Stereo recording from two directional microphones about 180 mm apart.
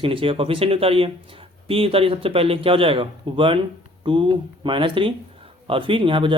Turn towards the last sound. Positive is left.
turn(degrees=-30)  # may be behind; listen again after turning